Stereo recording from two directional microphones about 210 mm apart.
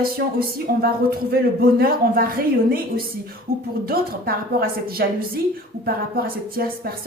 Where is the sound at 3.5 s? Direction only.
45° right (ahead or behind).